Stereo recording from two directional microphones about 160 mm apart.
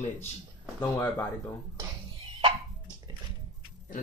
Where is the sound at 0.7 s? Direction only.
10° left (ahead or behind).